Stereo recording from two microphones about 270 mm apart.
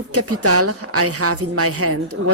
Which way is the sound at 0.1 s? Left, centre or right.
Right.